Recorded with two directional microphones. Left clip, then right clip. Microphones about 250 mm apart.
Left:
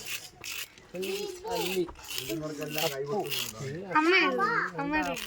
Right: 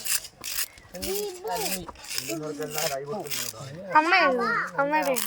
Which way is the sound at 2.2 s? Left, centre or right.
Centre.